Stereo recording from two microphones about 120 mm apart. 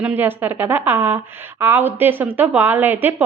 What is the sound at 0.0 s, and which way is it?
A woman's voice, 15° right (ahead or behind).